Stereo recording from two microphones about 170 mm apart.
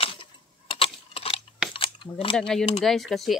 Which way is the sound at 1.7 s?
30° left (ahead or behind).